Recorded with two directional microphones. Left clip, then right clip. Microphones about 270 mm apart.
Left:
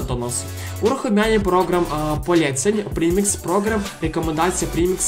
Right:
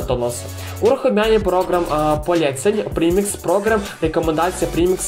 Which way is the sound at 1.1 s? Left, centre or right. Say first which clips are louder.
Right 2 dB; left.